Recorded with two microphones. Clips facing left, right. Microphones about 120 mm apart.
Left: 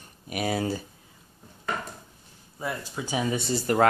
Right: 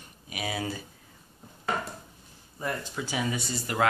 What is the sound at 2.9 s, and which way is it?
Speech, 25° left (ahead or behind).